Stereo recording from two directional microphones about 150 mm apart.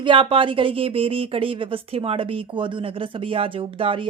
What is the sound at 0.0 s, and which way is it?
Speech, 35° right (ahead or behind).